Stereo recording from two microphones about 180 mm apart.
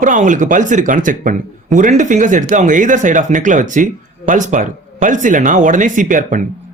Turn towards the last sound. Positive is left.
turn(degrees=-45)  # may be behind; listen again after turning